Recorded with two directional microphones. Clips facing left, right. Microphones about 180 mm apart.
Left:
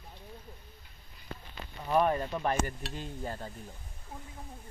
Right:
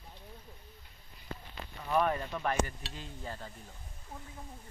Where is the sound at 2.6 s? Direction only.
45° left (ahead or behind).